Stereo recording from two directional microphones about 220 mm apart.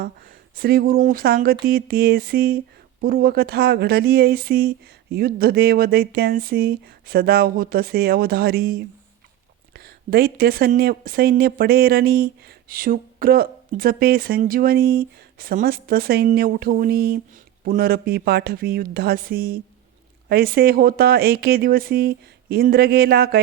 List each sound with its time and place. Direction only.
0.5 s speech: 40° right (ahead or behind)